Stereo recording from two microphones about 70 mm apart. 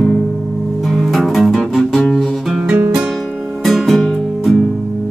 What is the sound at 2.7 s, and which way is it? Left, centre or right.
Music, right.